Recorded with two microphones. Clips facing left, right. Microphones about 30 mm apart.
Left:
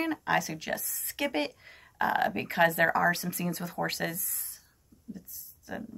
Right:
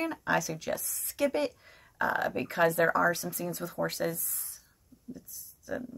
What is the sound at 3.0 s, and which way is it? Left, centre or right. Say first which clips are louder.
Speech: left 1 dB; left.